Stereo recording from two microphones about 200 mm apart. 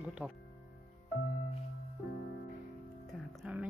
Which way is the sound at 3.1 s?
Centre (ahead or behind).